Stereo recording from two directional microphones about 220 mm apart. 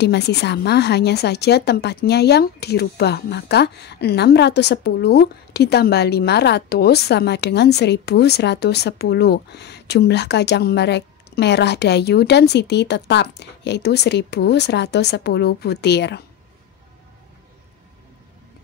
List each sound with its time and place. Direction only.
0.0 s a woman's voice: 50° left (ahead or behind)